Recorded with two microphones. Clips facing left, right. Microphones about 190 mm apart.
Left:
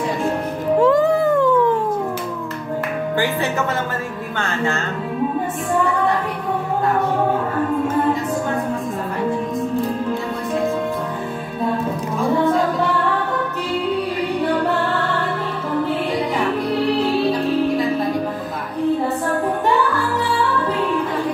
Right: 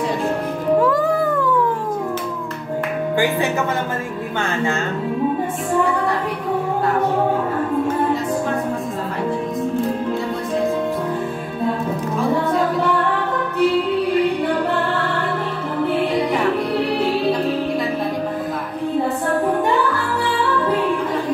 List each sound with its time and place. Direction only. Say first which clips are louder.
0.8 s music: left 3 dB; 25° left (ahead or behind)